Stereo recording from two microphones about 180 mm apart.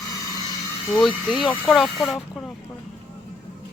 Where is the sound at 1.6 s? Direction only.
Centre (ahead or behind).